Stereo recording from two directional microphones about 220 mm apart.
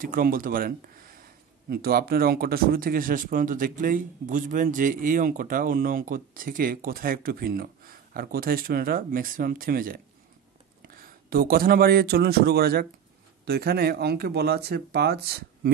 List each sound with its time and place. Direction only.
0.0 s speech: 40° right (ahead or behind)